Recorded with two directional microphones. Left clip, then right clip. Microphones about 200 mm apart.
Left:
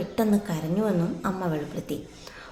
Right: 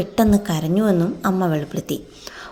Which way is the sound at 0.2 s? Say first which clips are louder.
Right 7 dB; 40° right (ahead or behind).